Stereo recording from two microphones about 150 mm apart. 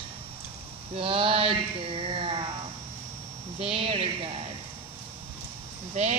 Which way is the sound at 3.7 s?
40° right (ahead or behind).